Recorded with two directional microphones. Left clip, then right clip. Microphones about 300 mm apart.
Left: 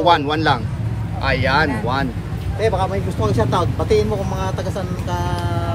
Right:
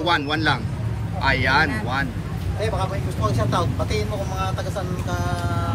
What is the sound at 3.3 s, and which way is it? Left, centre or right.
Speech, left.